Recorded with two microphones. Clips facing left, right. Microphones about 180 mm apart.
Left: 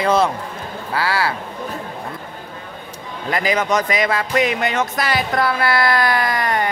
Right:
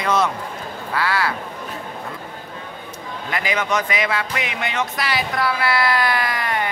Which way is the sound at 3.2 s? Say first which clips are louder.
Left 4 dB; 40° left (ahead or behind).